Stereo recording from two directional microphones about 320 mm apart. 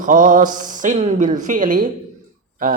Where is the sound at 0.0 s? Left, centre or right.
Right.